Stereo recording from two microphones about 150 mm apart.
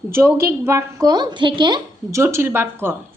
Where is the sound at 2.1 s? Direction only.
15° right (ahead or behind).